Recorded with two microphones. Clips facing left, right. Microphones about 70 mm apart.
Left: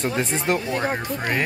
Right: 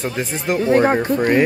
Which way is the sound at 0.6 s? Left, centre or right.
Right.